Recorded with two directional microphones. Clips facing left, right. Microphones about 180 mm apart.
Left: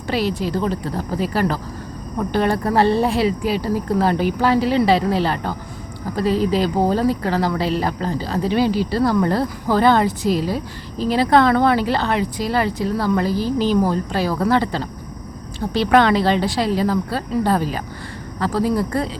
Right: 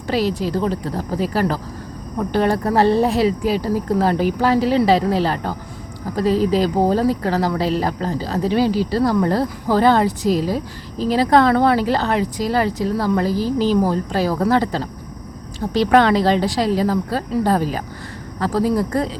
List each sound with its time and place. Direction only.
0.1 s speech: 40° right (ahead or behind)